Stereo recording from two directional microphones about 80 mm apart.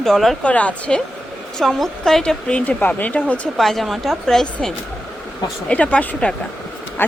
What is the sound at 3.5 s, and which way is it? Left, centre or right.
Speech, centre.